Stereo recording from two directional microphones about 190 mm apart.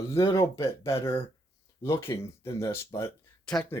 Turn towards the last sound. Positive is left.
turn(degrees=5)  # may be behind; listen again after turning